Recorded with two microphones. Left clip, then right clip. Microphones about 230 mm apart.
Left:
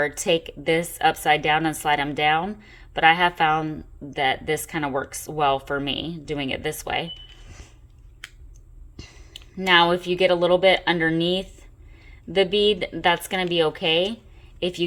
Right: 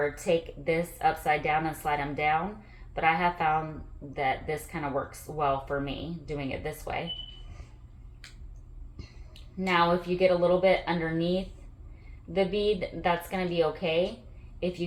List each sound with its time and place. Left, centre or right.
0.0 s speech: left
9.6 s a woman's voice: left